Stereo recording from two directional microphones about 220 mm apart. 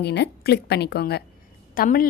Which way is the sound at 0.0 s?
50° left (ahead or behind).